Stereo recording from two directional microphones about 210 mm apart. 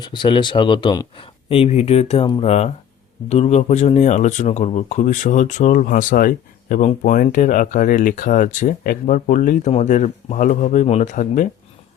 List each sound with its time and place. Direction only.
0.0 s speech: 20° left (ahead or behind); by 11.4 s 35° left (ahead or behind)